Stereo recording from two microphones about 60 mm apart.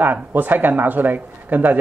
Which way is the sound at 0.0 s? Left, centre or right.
Right.